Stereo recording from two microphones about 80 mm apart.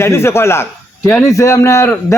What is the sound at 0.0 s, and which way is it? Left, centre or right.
A man's voice, left.